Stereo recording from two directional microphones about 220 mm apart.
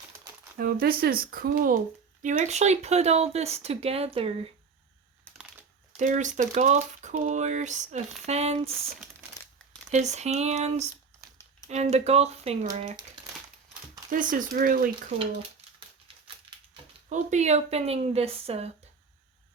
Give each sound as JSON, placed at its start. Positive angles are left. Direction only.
{"t": 0.5, "sound": "speech", "side_deg": -45}
{"t": 6.0, "sound": "speech", "side_deg": -35}
{"t": 9.9, "sound": "speech", "side_deg": -30}
{"t": 14.1, "sound": "speech", "side_deg": -40}
{"t": 16.5, "sound": "a sound", "side_deg": -25}
{"t": 17.1, "sound": "speech", "side_deg": -30}